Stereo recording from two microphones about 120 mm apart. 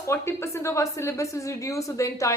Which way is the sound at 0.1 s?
20° left (ahead or behind).